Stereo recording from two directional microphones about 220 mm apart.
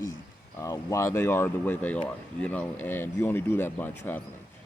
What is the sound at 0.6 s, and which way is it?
Speech, 15° left (ahead or behind).